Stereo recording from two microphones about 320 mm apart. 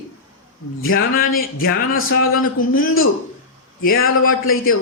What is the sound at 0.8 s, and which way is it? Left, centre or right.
Speech, left.